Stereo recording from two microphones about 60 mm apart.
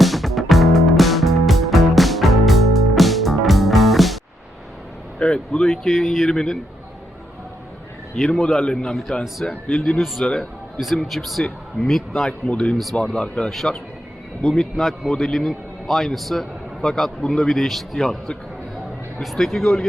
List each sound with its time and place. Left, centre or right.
0.0 s music: centre
5.2 s a man's voice: centre
8.1 s a man's voice: centre
10.2 s a man's voice: centre
10.8 s a man's voice: centre
12.5 s a man's voice: centre
12.8 s a man's voice: centre
13.1 s a man's voice: centre
13.5 s a man's voice: centre